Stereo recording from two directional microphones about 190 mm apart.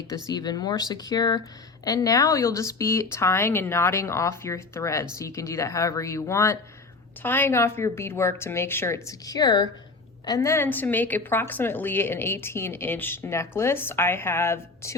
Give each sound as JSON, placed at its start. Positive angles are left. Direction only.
{"t": 0.3, "sound": "a woman's voice", "side_deg": 20}